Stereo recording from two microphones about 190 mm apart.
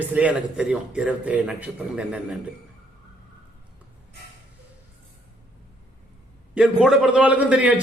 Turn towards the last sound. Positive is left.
turn(degrees=-5)  # may be behind; listen again after turning